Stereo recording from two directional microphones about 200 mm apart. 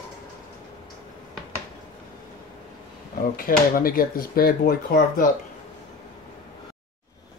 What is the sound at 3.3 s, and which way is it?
Speech, 45° left (ahead or behind).